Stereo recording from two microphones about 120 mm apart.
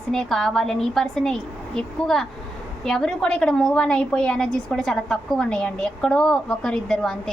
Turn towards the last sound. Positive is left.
turn(degrees=5)  # may be behind; listen again after turning